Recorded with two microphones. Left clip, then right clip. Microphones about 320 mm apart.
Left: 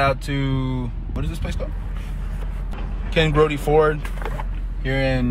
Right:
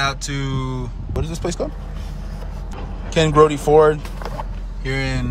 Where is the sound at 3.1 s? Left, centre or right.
Centre.